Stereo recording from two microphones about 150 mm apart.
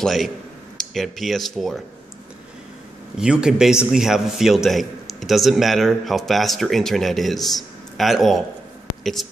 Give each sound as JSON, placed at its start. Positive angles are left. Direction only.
{"t": 0.0, "sound": "a man's voice", "side_deg": 0}
{"t": 3.2, "sound": "a man's voice", "side_deg": -5}